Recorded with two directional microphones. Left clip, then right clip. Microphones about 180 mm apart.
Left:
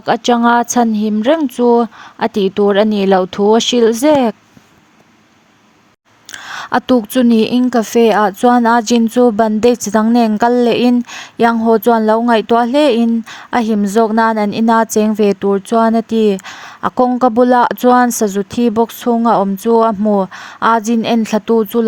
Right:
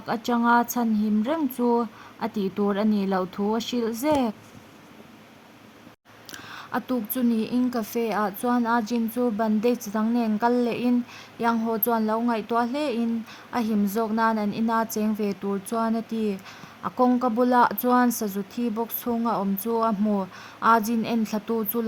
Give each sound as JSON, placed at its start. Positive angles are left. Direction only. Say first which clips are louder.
{"t": 0.0, "sound": "a woman's voice", "louder": "left 13 dB", "side_deg": 45}
{"t": 6.3, "sound": "a woman's voice", "louder": "left 14 dB", "side_deg": 55}